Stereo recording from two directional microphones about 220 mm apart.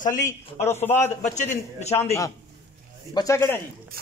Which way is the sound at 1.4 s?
30° left (ahead or behind).